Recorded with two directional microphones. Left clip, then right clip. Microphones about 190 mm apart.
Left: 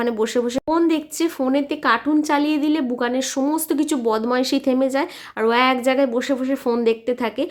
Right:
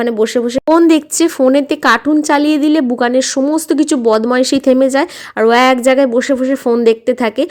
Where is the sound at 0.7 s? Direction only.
40° right (ahead or behind).